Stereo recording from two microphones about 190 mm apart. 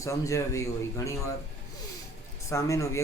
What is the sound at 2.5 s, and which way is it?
Speech, 15° left (ahead or behind).